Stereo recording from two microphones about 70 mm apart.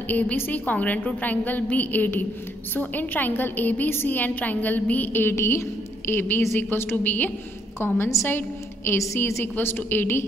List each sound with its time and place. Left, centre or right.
0.1 s a woman's voice: left
5.3 s a woman's voice: left